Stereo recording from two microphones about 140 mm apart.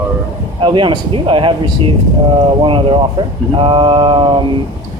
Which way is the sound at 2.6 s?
40° right (ahead or behind).